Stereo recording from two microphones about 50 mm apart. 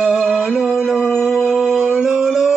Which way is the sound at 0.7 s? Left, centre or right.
Centre.